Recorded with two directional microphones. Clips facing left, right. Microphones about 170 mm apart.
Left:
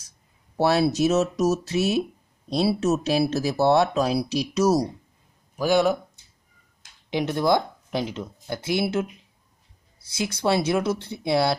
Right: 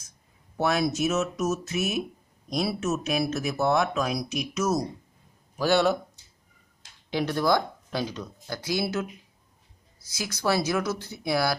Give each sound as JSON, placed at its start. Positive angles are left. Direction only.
{"t": 0.6, "sound": "speech", "side_deg": 35}
{"t": 5.6, "sound": "speech", "side_deg": 10}
{"t": 7.1, "sound": "speech", "side_deg": 20}
{"t": 10.1, "sound": "speech", "side_deg": 25}